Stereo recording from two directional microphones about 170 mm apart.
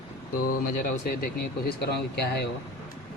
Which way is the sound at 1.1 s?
65° left (ahead or behind).